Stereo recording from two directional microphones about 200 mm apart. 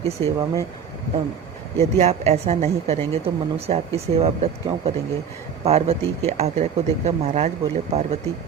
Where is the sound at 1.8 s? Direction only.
35° right (ahead or behind).